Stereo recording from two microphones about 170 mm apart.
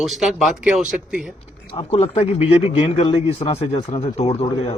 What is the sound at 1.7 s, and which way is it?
A man's voice, 35° left (ahead or behind).